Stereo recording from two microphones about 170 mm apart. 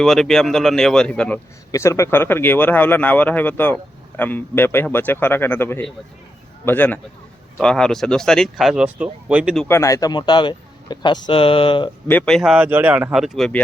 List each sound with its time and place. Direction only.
0.0 s speech: centre (ahead or behind)
1.7 s speech: 15° left (ahead or behind); by 9.6 s 5° right (ahead or behind)
9.6 s speech: 15° left (ahead or behind)
12.0 s speech: 10° left (ahead or behind)